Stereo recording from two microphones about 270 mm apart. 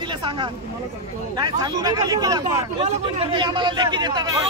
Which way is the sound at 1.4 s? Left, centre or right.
Centre.